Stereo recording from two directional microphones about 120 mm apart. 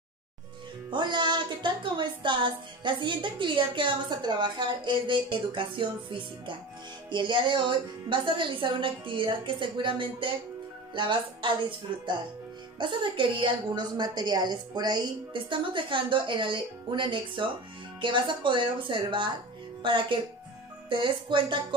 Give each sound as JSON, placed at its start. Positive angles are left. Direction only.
{"t": 0.8, "sound": "speech", "side_deg": -40}
{"t": 12.7, "sound": "speech", "side_deg": -40}